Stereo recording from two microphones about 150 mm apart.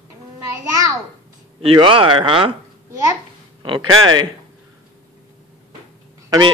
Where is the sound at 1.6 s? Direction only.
35° right (ahead or behind).